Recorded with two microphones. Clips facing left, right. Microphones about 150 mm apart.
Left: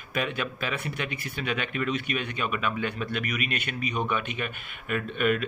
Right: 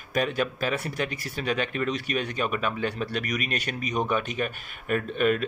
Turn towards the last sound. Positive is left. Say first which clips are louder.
# right 2 dB
turn(degrees=-35)  # may be behind; listen again after turning